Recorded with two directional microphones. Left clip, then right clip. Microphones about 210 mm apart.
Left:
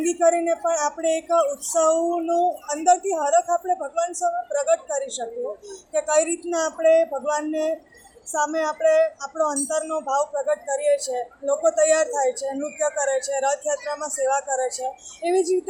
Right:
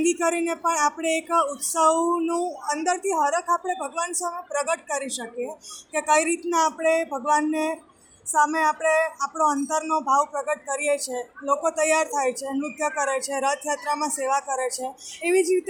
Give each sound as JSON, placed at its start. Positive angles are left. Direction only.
{"t": 0.0, "sound": "speech", "side_deg": -50}